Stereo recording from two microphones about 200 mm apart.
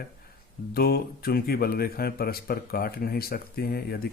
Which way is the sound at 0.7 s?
50° left (ahead or behind).